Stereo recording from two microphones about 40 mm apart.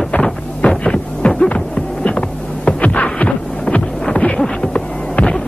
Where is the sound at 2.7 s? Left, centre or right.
Left.